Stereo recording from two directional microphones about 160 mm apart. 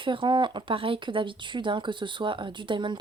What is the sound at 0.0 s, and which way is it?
A woman's voice, 30° right (ahead or behind).